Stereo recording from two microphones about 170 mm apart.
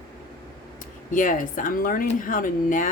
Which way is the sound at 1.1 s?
50° left (ahead or behind).